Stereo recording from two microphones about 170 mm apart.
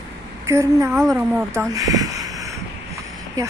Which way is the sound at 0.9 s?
5° right (ahead or behind).